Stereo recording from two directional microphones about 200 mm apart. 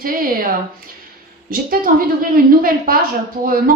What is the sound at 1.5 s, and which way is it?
Speech, 45° right (ahead or behind).